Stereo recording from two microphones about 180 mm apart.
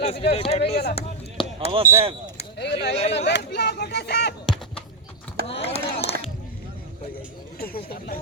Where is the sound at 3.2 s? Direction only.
70° left (ahead or behind).